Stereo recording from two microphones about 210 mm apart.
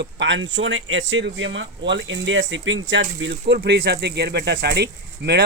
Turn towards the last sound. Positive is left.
turn(degrees=-50)  # may be behind; listen again after turning